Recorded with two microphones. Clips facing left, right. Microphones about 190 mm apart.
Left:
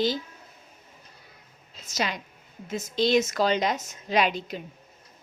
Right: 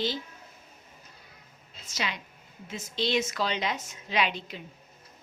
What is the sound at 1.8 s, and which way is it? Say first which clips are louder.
A woman's voice: left 5 dB; 45° left (ahead or behind).